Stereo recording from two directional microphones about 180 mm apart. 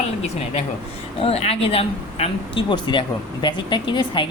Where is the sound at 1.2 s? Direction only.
35° left (ahead or behind).